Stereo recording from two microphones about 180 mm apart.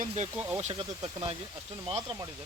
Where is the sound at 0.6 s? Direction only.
30° right (ahead or behind).